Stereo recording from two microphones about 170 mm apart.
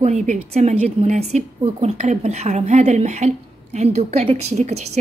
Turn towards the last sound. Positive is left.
turn(degrees=-40)  # may be behind; listen again after turning